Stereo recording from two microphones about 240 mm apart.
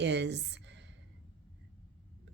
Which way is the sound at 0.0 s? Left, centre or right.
Right.